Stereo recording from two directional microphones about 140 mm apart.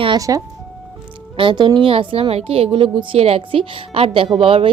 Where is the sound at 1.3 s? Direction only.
35° right (ahead or behind).